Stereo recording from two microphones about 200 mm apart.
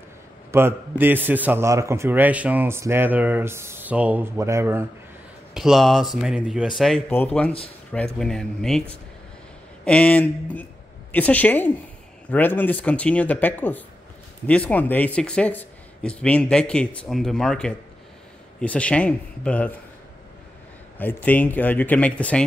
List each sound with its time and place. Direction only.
0.5 s a man's voice: 10° right (ahead or behind)
5.5 s speech: centre (ahead or behind)
7.9 s speech: 5° left (ahead or behind)
21.0 s speech: 10° left (ahead or behind)